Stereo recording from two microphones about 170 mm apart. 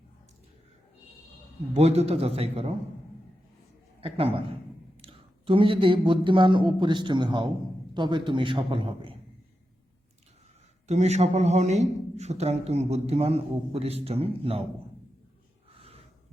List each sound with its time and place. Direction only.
1.7 s a man's voice: 40° right (ahead or behind)
4.0 s a man's voice: 35° right (ahead or behind)
10.8 s a man's voice: 40° right (ahead or behind)